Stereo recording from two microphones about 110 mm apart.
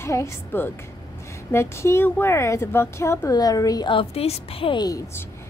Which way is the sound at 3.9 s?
65° left (ahead or behind).